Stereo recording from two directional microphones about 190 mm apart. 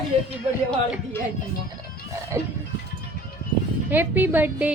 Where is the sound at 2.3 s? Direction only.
15° right (ahead or behind).